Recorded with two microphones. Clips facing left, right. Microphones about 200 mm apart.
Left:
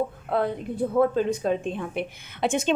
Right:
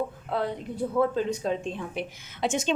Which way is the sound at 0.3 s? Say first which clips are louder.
Left 5 dB; 50° left (ahead or behind).